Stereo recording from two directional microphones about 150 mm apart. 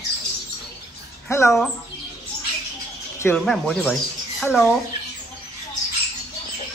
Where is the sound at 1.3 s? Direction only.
20° left (ahead or behind).